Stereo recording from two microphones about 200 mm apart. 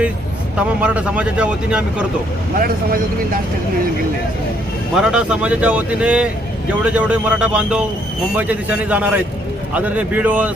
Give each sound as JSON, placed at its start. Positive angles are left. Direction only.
{"t": 0.8, "sound": "speech", "side_deg": -5}
{"t": 2.6, "sound": "speech", "side_deg": -45}
{"t": 4.9, "sound": "a man's voice", "side_deg": -5}